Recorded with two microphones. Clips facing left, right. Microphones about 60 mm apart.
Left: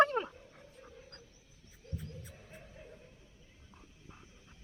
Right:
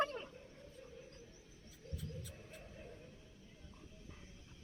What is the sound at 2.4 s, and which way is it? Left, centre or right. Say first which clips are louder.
Chuckle: left 1 dB; left.